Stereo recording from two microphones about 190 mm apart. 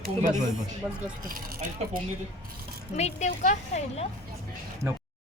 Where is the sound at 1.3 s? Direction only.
50° right (ahead or behind).